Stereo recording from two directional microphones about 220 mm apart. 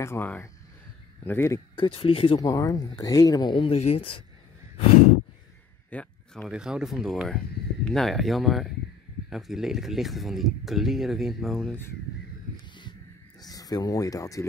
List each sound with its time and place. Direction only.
0.0 s speech: 10° left (ahead or behind)
1.9 s speech: 25° left (ahead or behind)
5.9 s a sound: 5° left (ahead or behind)
6.5 s speech: 5° right (ahead or behind)
13.4 s speech: 15° left (ahead or behind)